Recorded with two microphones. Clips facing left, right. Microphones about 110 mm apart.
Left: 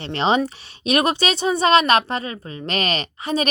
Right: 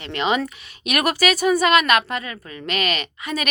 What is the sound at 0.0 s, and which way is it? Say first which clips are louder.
Speech: left 3 dB; 30° left (ahead or behind).